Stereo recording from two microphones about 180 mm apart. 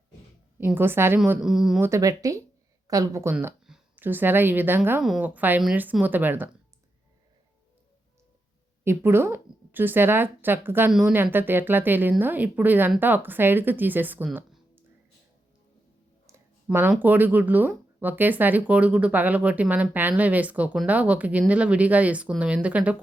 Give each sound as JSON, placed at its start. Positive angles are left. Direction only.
{"t": 0.6, "sound": "a woman's voice", "side_deg": -10}
{"t": 1.8, "sound": "a woman's voice", "side_deg": -15}
{"t": 8.8, "sound": "speech", "side_deg": -15}
{"t": 16.6, "sound": "speech", "side_deg": -5}